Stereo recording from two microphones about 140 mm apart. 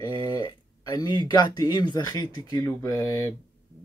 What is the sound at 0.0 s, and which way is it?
Speech, 30° left (ahead or behind).